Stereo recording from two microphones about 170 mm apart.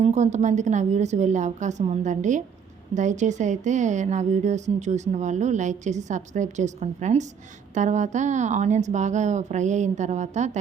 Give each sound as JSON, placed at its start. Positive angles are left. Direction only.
{"t": 0.0, "sound": "a woman's voice", "side_deg": -45}